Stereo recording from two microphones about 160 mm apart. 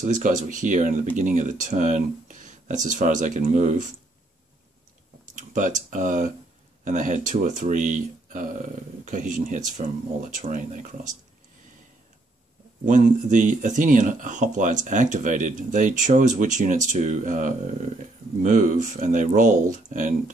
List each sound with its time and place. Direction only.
0.0 s speech: 50° right (ahead or behind)
5.3 s speech: 50° right (ahead or behind)
12.8 s speech: 50° right (ahead or behind)